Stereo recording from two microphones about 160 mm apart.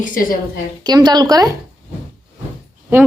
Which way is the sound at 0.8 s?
25° right (ahead or behind).